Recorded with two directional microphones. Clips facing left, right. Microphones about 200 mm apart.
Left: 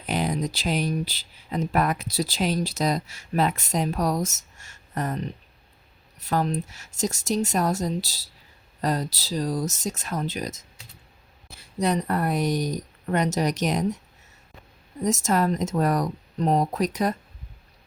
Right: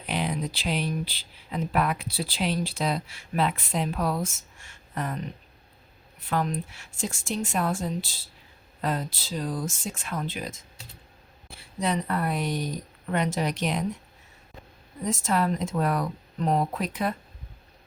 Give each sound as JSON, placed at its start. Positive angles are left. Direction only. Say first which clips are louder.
{"t": 0.0, "sound": "speech", "louder": "left 3 dB", "side_deg": 45}
{"t": 15.0, "sound": "speech", "louder": "left 3 dB", "side_deg": 45}